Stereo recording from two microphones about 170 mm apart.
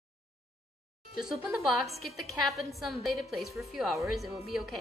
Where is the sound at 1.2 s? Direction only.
Centre (ahead or behind).